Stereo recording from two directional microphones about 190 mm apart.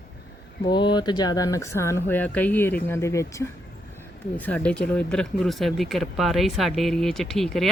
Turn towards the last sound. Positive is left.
turn(degrees=0)  # may be behind; listen again after turning